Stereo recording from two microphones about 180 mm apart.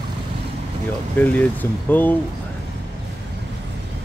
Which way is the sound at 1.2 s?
10° left (ahead or behind).